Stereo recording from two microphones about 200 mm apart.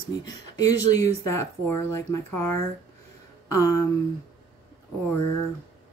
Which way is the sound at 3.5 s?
15° left (ahead or behind).